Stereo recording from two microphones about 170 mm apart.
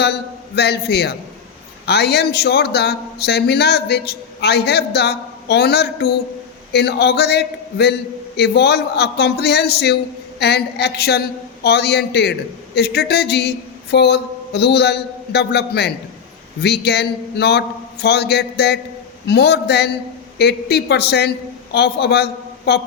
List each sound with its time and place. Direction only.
0.0 s a man's voice: 75° left (ahead or behind)